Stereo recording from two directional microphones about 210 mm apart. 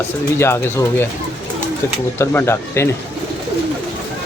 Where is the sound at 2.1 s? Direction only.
10° left (ahead or behind).